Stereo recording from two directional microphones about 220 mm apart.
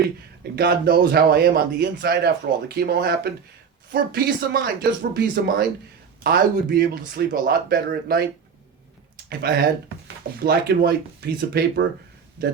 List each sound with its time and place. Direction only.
0.5 s a man's voice: 45° right (ahead or behind)
9.4 s a man's voice: 45° right (ahead or behind)